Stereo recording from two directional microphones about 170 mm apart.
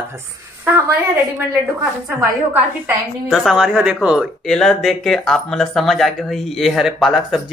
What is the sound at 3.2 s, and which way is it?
Speech, centre (ahead or behind).